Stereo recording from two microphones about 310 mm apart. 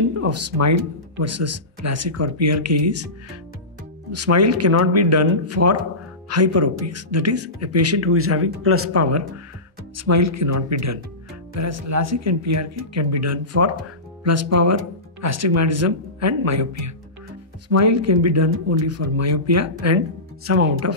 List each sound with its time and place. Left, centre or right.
0.1 s speech: right
4.1 s speech: right
20.4 s speech: right